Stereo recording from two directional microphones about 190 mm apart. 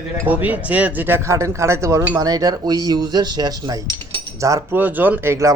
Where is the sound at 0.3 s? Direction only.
10° right (ahead or behind).